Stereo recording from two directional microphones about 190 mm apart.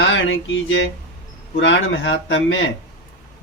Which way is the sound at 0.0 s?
80° left.